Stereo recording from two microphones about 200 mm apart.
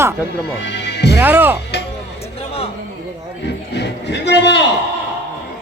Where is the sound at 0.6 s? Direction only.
60° left (ahead or behind).